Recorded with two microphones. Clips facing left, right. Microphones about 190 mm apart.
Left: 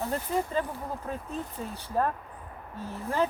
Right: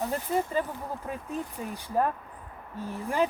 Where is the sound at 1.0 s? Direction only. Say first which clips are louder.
Right 1 dB; 15° right (ahead or behind).